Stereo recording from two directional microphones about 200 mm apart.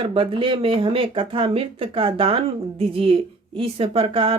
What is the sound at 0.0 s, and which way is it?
Speech, 25° right (ahead or behind).